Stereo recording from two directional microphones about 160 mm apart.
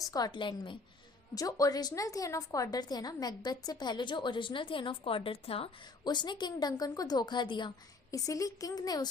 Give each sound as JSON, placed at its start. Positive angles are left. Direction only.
{"t": 0.0, "sound": "a woman's voice", "side_deg": 20}